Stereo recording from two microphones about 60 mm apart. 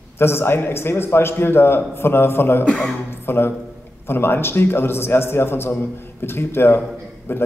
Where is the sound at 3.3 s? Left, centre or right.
Left.